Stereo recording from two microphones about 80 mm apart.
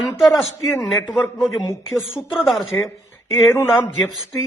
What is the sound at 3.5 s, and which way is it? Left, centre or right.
Speech, left.